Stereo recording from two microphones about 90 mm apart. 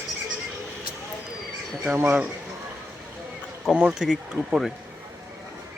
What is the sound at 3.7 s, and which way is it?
Speech, 10° right (ahead or behind).